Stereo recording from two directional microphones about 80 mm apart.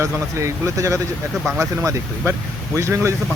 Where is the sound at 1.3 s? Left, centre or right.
Centre.